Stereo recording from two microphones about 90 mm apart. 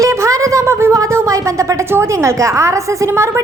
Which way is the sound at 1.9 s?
30° right (ahead or behind).